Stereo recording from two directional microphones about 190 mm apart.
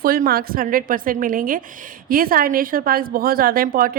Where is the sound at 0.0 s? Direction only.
50° right (ahead or behind).